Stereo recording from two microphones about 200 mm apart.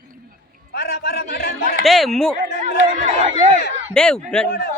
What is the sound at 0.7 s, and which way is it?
Speech, 50° left (ahead or behind).